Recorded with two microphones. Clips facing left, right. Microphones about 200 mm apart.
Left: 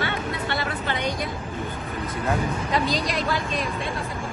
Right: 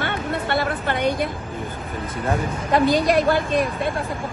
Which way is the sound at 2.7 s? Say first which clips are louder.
Right 11 dB; 55° right (ahead or behind).